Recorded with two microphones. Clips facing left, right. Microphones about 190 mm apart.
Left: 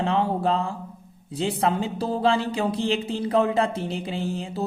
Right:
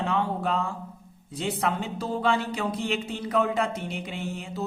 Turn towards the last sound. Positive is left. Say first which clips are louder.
# left 5 dB
turn(degrees=30)  # may be behind; listen again after turning